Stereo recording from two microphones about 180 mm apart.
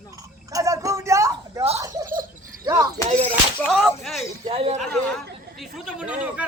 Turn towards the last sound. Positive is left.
turn(degrees=-5)  # may be behind; listen again after turning